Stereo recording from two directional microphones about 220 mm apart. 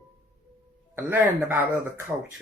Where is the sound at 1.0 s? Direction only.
10° right (ahead or behind).